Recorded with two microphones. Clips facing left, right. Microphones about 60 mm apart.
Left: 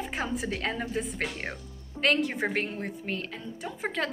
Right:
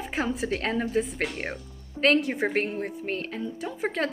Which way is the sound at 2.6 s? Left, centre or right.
Right.